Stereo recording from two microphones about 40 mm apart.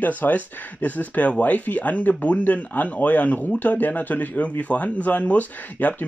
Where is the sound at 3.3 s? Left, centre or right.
Left.